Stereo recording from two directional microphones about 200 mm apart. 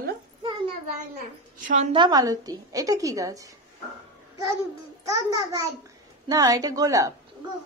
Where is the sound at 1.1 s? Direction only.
40° right (ahead or behind).